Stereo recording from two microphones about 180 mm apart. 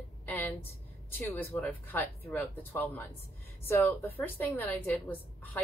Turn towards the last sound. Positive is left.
turn(degrees=10)  # may be behind; listen again after turning